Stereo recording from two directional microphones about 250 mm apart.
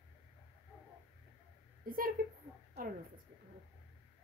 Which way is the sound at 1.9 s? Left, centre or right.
Right.